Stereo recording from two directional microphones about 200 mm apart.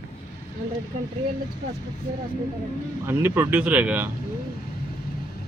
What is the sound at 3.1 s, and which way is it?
Speech, 10° right (ahead or behind).